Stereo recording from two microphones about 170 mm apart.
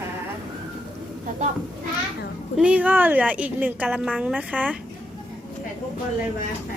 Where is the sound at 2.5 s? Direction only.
5° right (ahead or behind).